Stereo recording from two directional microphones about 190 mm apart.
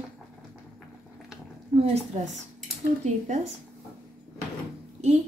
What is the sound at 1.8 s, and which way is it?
A woman's voice, 35° right (ahead or behind).